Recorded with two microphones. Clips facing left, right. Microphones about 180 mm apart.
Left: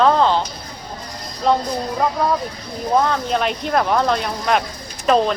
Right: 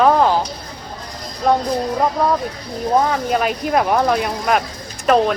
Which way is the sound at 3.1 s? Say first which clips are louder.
Right 2 dB; 5° right (ahead or behind).